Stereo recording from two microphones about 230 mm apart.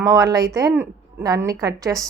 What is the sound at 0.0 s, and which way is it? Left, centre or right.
A woman's voice, centre.